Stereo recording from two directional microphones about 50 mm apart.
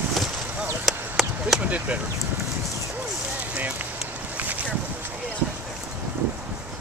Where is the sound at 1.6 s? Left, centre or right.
Right.